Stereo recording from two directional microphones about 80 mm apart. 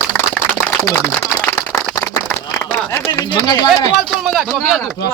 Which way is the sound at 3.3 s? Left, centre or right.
Left.